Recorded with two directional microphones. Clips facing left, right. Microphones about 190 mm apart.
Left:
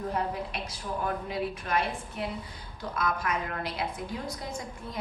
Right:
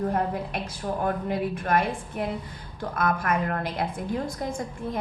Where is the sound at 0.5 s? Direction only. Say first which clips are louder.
Right 5 dB; 50° right (ahead or behind).